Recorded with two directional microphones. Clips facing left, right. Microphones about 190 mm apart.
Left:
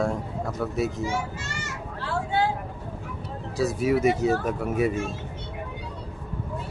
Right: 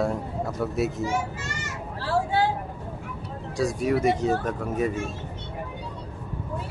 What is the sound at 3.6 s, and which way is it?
Speech, 5° left (ahead or behind).